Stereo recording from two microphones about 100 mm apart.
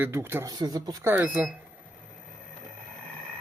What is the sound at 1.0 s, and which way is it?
Speech, 20° right (ahead or behind).